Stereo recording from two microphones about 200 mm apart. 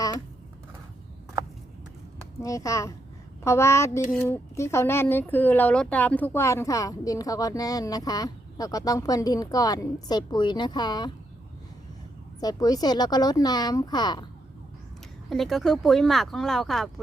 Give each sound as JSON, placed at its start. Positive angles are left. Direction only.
{"t": 2.4, "sound": "speech", "side_deg": 15}
{"t": 12.4, "sound": "speech", "side_deg": 20}
{"t": 15.3, "sound": "speech", "side_deg": 0}